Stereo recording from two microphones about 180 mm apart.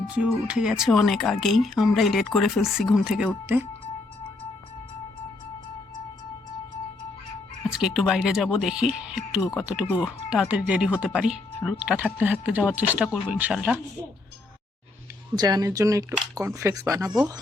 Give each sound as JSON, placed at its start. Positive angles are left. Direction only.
{"t": 0.1, "sound": "speech", "side_deg": -5}
{"t": 7.7, "sound": "speech", "side_deg": -5}
{"t": 15.4, "sound": "speech", "side_deg": -20}